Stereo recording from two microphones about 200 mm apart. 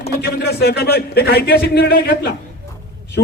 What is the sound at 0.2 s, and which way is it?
A man's voice, 55° left (ahead or behind).